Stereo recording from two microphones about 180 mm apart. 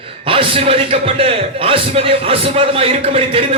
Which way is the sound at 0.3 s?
30° right (ahead or behind).